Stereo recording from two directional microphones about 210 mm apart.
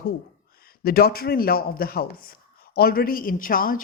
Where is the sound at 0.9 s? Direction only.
45° left (ahead or behind).